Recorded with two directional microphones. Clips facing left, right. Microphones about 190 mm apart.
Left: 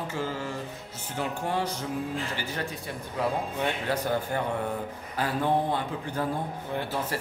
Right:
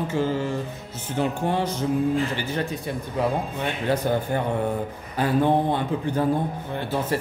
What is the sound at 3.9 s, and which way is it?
Mantra, 25° right (ahead or behind).